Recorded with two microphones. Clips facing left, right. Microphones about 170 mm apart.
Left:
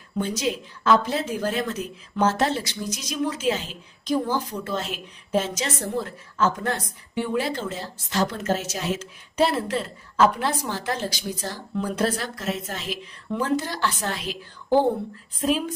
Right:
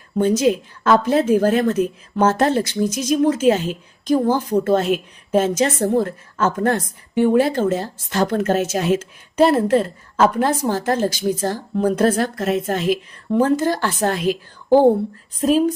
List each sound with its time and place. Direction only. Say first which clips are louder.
0.2 s a woman's voice: right 10 dB; 50° right (ahead or behind)